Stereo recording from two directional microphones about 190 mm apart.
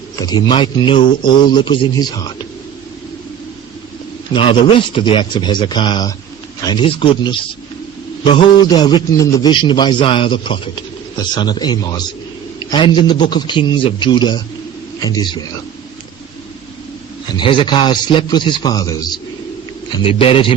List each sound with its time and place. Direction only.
0.2 s a man's voice: 20° left (ahead or behind)
4.3 s a man's voice: 25° left (ahead or behind)
17.3 s a man's voice: 25° left (ahead or behind)